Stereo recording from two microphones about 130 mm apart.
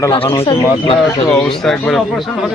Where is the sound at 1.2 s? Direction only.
15° left (ahead or behind).